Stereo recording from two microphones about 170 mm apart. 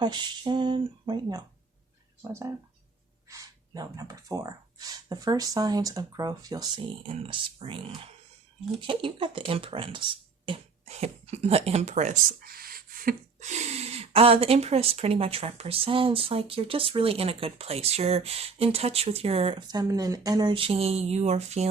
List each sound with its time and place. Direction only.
0.0 s speech: 25° right (ahead or behind)
3.2 s speech: 20° right (ahead or behind); by 21.7 s 40° right (ahead or behind)